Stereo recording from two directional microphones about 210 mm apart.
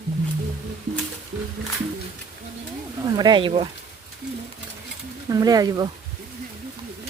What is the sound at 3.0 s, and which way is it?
Speech, 20° right (ahead or behind).